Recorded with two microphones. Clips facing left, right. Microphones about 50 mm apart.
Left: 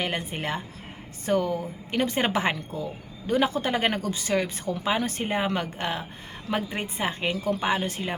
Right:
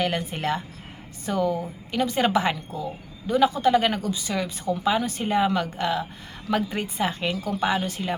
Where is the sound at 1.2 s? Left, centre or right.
Left.